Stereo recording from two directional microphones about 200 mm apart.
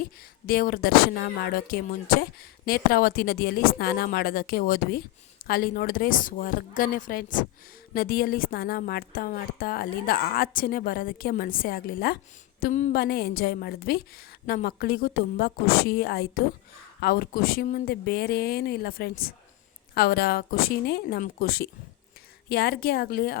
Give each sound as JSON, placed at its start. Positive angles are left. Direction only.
{"t": 0.0, "sound": "a woman's voice", "side_deg": 45}